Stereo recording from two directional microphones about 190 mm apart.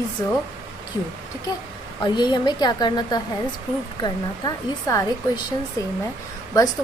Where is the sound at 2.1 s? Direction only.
25° left (ahead or behind).